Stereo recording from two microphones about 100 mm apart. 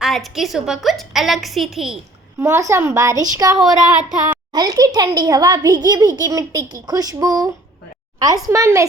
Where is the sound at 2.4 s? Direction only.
30° right (ahead or behind).